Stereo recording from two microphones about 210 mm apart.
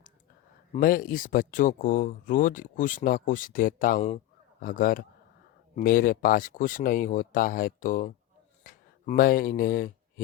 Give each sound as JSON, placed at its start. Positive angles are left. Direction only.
{"t": 0.7, "sound": "speech", "side_deg": 45}